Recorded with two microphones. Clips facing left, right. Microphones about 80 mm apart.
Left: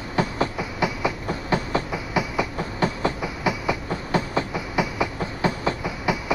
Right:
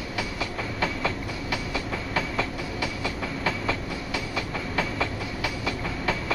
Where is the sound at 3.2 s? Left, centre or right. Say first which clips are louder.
Left 3 dB; centre.